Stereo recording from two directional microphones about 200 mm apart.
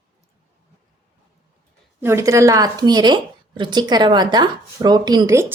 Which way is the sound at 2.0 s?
15° right (ahead or behind).